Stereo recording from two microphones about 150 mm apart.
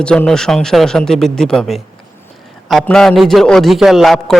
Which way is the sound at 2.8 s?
5° left (ahead or behind).